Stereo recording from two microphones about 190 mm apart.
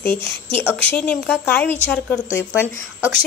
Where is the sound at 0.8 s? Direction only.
5° left (ahead or behind).